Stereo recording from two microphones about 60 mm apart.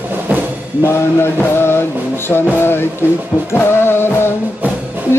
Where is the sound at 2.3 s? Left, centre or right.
Left.